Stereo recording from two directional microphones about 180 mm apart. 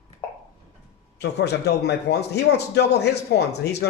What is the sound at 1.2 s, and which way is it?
A man's voice, 65° left (ahead or behind).